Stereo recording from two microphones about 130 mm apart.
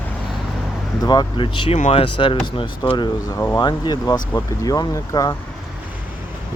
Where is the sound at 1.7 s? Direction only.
50° left (ahead or behind); by 5.3 s 30° left (ahead or behind).